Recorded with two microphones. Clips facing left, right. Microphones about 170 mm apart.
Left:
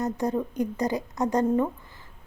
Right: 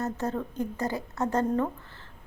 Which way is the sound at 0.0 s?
15° left (ahead or behind).